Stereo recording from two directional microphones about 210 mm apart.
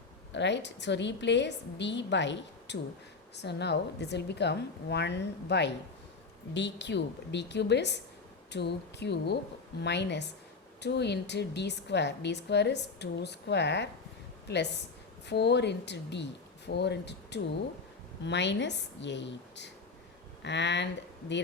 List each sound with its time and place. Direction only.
0.3 s a woman's voice: 55° left (ahead or behind)